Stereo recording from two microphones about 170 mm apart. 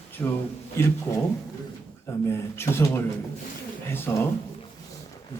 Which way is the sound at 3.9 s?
15° left (ahead or behind).